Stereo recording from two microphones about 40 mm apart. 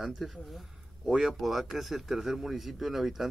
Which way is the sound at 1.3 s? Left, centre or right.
Centre.